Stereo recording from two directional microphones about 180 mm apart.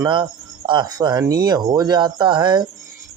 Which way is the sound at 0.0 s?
25° right (ahead or behind).